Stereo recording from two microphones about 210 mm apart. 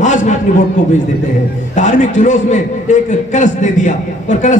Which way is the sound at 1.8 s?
35° left (ahead or behind).